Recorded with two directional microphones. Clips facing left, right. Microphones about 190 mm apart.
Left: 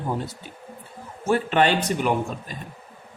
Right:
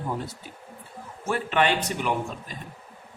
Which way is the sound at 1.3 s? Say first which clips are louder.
Left 4 dB; 35° left (ahead or behind).